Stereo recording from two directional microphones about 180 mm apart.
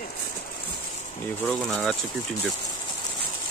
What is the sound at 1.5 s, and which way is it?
Speech, 5° left (ahead or behind).